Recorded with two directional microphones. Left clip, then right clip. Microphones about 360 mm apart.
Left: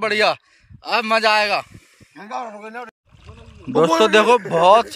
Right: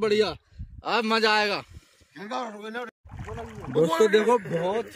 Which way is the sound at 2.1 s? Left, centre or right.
Centre.